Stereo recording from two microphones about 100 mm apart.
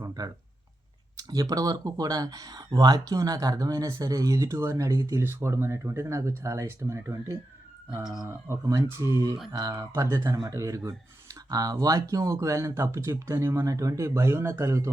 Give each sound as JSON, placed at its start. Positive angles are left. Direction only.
{"t": 0.0, "sound": "a sound", "side_deg": -40}
{"t": 1.1, "sound": "speech", "side_deg": -40}
{"t": 8.4, "sound": "speech", "side_deg": -30}